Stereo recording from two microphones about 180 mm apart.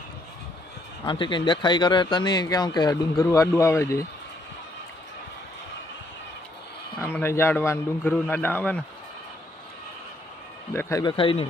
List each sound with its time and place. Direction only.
1.0 s speech: 25° left (ahead or behind)
7.0 s a man's voice: 10° left (ahead or behind)
10.8 s a man's voice: 15° left (ahead or behind)
11.2 s speech: 30° left (ahead or behind)